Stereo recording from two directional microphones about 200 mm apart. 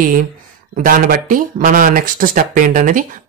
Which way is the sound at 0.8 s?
45° right (ahead or behind).